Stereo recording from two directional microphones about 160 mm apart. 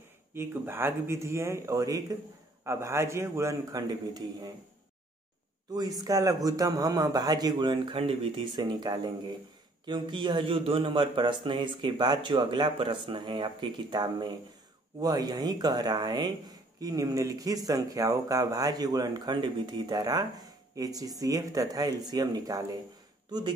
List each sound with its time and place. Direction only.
0.3 s speech: 15° right (ahead or behind)
5.7 s speech: 25° right (ahead or behind)